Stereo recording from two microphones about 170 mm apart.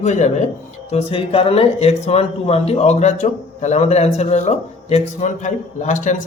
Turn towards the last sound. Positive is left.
turn(degrees=45)  # may be behind; listen again after turning